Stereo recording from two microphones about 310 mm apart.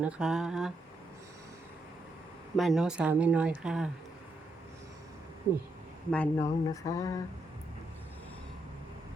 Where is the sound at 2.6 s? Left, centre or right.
Centre.